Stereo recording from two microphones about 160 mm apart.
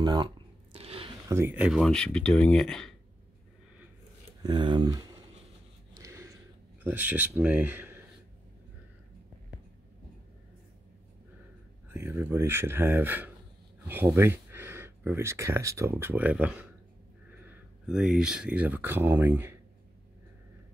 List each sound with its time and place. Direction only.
0.0 s speech: 25° right (ahead or behind)
0.7 s a sound: 35° right (ahead or behind)
1.3 s speech: 10° right (ahead or behind)
1.8 s speech: 5° left (ahead or behind)
4.4 s speech: 25° right (ahead or behind)
5.9 s a sound: 20° right (ahead or behind)
11.9 s speech: 15° right (ahead or behind)